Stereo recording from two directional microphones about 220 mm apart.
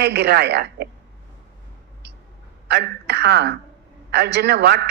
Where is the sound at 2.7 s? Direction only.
50° right (ahead or behind).